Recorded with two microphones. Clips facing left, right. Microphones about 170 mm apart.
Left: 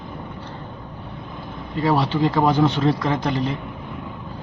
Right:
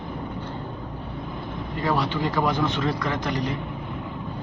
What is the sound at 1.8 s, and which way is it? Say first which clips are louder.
Speech: left 5 dB; 30° left (ahead or behind).